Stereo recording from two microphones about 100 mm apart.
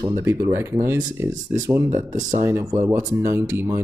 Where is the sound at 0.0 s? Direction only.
30° right (ahead or behind).